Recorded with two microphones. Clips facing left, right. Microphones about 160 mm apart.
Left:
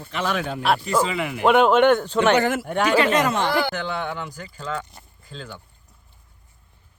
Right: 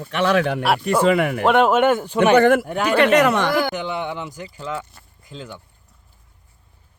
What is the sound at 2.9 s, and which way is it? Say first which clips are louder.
Speech: right 6 dB; 65° right (ahead or behind).